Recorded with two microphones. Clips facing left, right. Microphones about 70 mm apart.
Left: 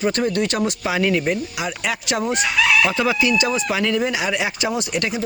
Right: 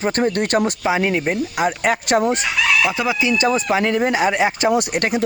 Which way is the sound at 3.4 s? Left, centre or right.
Right.